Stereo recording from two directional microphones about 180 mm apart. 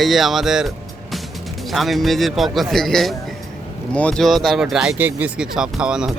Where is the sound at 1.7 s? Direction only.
Centre (ahead or behind).